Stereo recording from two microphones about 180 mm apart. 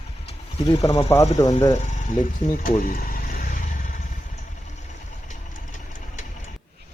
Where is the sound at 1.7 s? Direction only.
40° left (ahead or behind).